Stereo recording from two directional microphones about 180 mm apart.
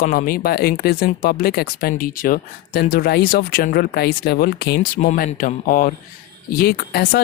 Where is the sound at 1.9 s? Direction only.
50° left (ahead or behind).